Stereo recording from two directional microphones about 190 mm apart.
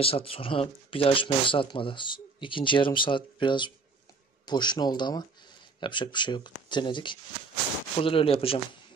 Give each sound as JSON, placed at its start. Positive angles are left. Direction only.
{"t": 0.0, "sound": "speech", "side_deg": 30}